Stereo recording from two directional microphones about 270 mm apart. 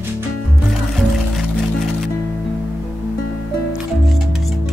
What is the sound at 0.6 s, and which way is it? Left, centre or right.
Music, centre.